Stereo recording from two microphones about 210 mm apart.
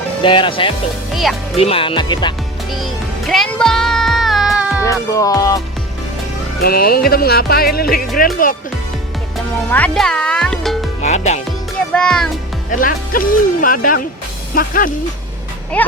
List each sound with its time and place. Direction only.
0.2 s speech: 25° left (ahead or behind)
1.1 s speech: centre (ahead or behind)
1.5 s speech: 25° left (ahead or behind)
2.7 s music: centre (ahead or behind)
4.8 s music: 15° left (ahead or behind)
6.6 s music: 45° left (ahead or behind)
9.6 s music: 5° left (ahead or behind)
11.0 s music: 35° left (ahead or behind)
11.9 s speech: 5° left (ahead or behind)
12.7 s speech: 40° left (ahead or behind)
15.7 s speech: 5° left (ahead or behind)